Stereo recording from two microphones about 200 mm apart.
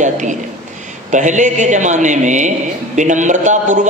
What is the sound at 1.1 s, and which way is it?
A man's voice, 40° right (ahead or behind).